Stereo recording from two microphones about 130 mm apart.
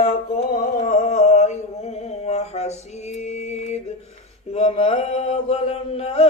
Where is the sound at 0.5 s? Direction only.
75° left (ahead or behind).